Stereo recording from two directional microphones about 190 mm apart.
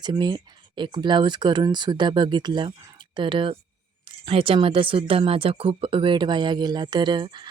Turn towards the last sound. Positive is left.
turn(degrees=-25)  # may be behind; listen again after turning